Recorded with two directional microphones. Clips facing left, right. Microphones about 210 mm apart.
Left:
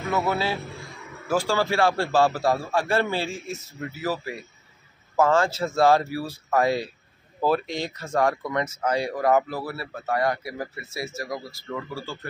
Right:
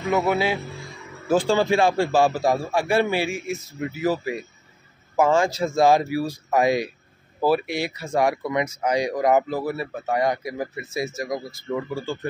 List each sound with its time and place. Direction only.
0.1 s speech: 15° right (ahead or behind)